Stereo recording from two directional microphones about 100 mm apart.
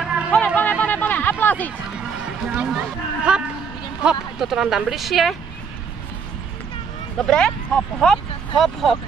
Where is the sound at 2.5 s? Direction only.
10° right (ahead or behind).